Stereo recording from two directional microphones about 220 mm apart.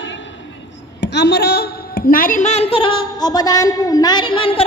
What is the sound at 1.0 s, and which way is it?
A woman's voice, 50° left (ahead or behind).